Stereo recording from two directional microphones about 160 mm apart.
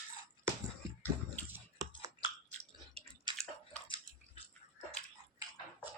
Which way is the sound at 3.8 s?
30° left (ahead or behind).